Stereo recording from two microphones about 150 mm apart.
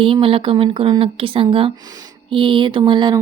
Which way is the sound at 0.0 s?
35° right (ahead or behind).